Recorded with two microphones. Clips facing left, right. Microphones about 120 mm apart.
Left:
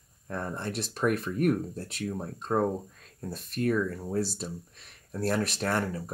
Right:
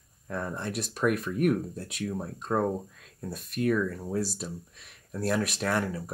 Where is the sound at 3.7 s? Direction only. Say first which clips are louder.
Right 1 dB; centre (ahead or behind).